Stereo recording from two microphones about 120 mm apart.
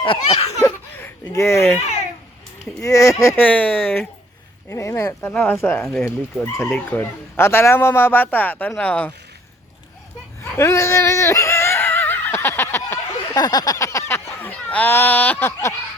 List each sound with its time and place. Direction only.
0.0 s laughter: 55° left (ahead or behind)
0.6 s laughter: 15° left (ahead or behind)
1.3 s speech: 25° left (ahead or behind)
2.8 s speech: 25° left (ahead or behind)
5.3 s speech: 10° left (ahead or behind)
10.6 s a sound: 25° left (ahead or behind)
13.3 s a sound: 35° left (ahead or behind)
14.3 s speech: 15° left (ahead or behind)